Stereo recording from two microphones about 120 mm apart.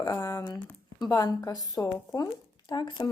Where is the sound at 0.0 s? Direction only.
30° left (ahead or behind).